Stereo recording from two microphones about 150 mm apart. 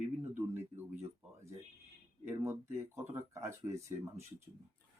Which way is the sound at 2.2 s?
15° right (ahead or behind).